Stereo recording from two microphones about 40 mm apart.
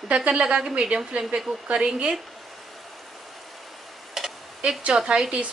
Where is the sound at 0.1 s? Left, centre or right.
Right.